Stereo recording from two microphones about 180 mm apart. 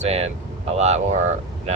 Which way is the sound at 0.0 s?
35° right (ahead or behind).